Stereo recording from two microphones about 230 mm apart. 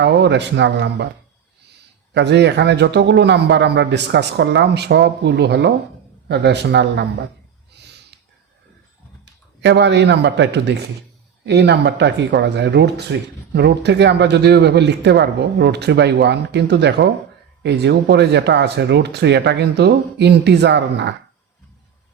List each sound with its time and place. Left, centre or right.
0.0 s speech: right
2.1 s speech: right
9.6 s speech: right